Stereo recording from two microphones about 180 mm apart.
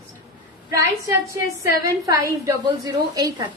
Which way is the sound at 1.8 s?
20° right (ahead or behind).